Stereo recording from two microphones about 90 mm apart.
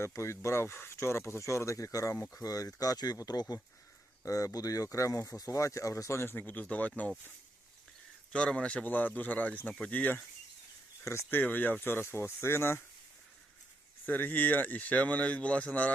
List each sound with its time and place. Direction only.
0.0 s speech: 35° left (ahead or behind); by 7.1 s 15° left (ahead or behind)
8.3 s speech: 10° left (ahead or behind); by 12.8 s 25° left (ahead or behind)
14.0 s speech: 20° left (ahead or behind)